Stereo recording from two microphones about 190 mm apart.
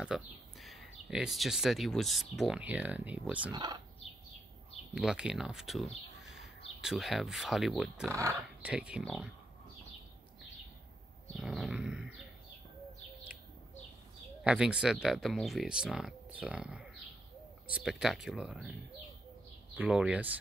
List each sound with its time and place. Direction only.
0.0 s speech: centre (ahead or behind)
4.9 s speech: 5° right (ahead or behind)
8.1 s speech: 15° right (ahead or behind)
8.6 s speech: 5° right (ahead or behind)
11.3 s a sound: centre (ahead or behind)
14.4 s speech: 5° right (ahead or behind)
19.8 s speech: 5° right (ahead or behind)